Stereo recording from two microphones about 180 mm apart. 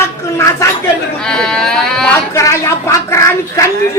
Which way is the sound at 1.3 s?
5° left (ahead or behind).